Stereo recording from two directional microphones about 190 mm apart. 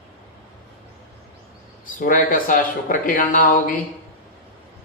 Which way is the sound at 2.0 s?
45° left (ahead or behind).